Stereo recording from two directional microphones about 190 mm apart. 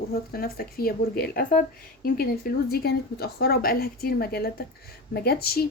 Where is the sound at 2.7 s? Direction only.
55° left (ahead or behind).